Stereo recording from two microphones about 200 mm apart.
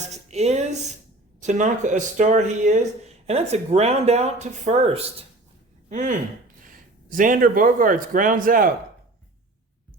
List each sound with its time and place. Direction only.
0.1 s a man's voice: 35° right (ahead or behind)